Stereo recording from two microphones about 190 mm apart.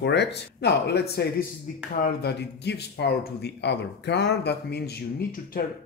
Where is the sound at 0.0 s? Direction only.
65° left (ahead or behind).